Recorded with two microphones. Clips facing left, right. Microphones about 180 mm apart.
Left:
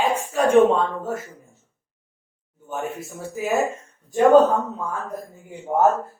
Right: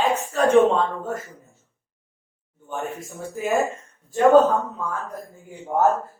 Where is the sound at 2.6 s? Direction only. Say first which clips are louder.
Left 1 dB; 5° left (ahead or behind).